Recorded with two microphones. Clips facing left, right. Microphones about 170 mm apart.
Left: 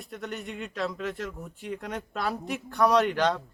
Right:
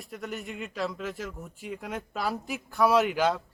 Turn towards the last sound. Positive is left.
turn(degrees=-5)  # may be behind; listen again after turning